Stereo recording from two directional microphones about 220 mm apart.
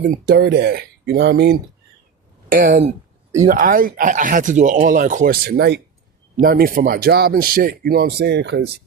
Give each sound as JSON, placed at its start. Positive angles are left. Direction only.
{"t": 0.0, "sound": "speech", "side_deg": -45}